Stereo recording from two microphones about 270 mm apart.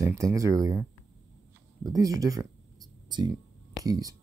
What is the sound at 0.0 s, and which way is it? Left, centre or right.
Speech, centre.